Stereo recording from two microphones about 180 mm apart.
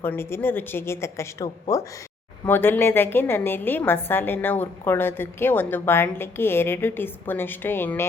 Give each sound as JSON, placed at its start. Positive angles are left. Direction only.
{"t": 0.0, "sound": "a woman's voice", "side_deg": 10}